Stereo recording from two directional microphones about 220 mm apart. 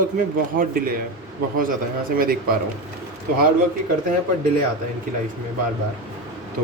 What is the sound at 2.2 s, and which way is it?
Speech, 45° right (ahead or behind).